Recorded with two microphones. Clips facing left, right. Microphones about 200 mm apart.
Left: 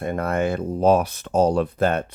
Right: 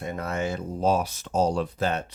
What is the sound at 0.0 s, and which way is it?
Speech, 55° left (ahead or behind).